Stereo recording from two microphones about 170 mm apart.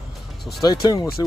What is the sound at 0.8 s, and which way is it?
Speech, 20° left (ahead or behind).